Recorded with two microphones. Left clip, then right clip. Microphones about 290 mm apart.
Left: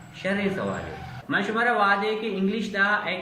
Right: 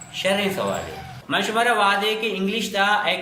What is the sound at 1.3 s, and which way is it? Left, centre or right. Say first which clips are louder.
Speech: right 3 dB; centre.